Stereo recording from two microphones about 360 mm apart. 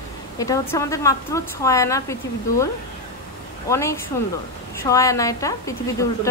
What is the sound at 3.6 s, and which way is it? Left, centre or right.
A woman's voice, centre.